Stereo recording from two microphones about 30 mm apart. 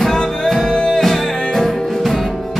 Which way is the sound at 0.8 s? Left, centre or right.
Centre.